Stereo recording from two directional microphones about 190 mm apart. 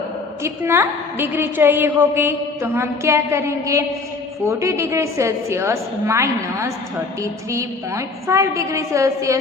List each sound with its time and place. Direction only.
0.4 s a woman's voice: 15° right (ahead or behind)